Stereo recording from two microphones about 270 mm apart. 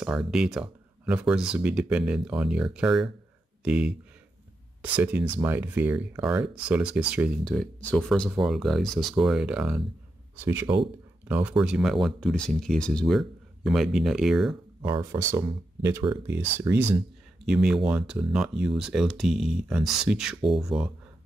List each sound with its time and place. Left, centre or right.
0.0 s speech: centre
4.9 s speech: centre
14.8 s speech: centre